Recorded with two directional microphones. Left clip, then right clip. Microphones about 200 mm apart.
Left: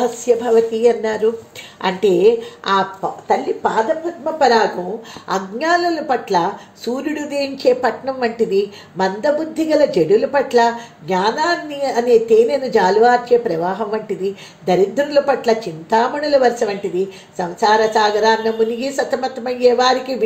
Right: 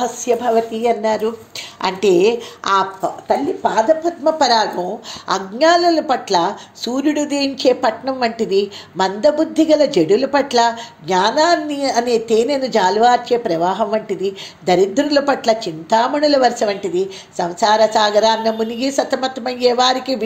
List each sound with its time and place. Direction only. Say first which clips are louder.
0.0 s a woman's voice: left 1 dB; 30° right (ahead or behind)
3.3 s a woman's voice: even; 50° right (ahead or behind)
5.3 s a woman's voice: right 4 dB; 35° right (ahead or behind)